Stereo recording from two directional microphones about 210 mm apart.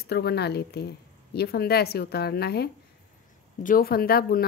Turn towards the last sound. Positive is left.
turn(degrees=45)  # may be behind; listen again after turning